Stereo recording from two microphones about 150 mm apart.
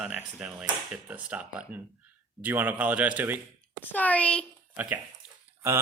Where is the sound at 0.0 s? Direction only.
5° right (ahead or behind).